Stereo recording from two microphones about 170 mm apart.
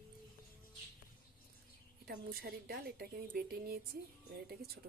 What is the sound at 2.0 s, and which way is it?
A woman's voice, 65° right (ahead or behind).